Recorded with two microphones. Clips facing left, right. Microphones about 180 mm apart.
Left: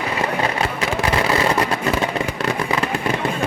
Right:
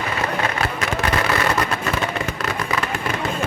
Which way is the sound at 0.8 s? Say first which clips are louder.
Left 2 dB; 25° left (ahead or behind).